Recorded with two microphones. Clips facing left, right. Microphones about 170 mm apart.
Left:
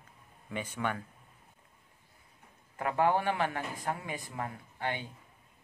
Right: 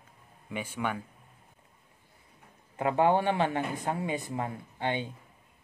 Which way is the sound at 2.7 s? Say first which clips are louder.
Right 4 dB; 20° right (ahead or behind).